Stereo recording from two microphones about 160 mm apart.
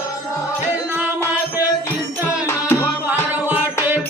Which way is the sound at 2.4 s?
15° left (ahead or behind).